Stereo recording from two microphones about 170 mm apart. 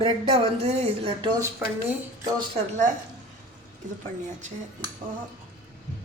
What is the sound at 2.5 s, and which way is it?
Speech, 45° right (ahead or behind).